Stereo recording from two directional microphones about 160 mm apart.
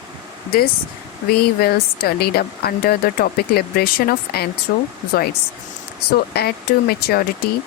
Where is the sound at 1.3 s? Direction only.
75° left (ahead or behind).